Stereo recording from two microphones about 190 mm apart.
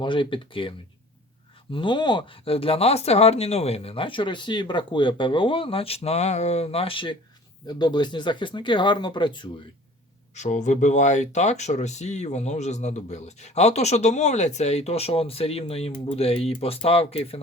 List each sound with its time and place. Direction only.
0.0 s speech: 25° left (ahead or behind)
1.7 s speech: 25° left (ahead or behind)
10.3 s speech: 40° left (ahead or behind)